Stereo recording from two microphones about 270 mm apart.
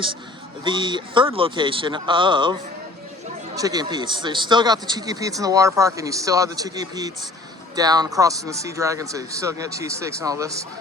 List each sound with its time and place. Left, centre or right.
0.6 s speech: centre